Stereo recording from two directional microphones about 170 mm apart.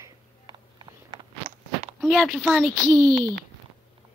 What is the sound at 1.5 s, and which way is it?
Walk, 35° right (ahead or behind).